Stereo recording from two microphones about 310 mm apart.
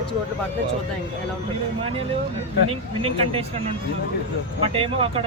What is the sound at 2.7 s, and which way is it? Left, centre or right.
Speech, centre.